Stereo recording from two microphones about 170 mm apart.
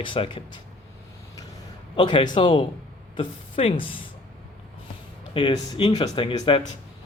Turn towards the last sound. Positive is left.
turn(degrees=30)  # may be behind; listen again after turning